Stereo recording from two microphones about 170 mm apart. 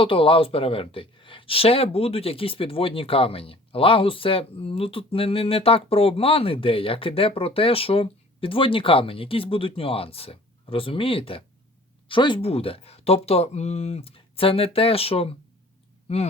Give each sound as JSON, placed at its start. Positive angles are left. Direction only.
{"t": 0.0, "sound": "speech", "side_deg": 30}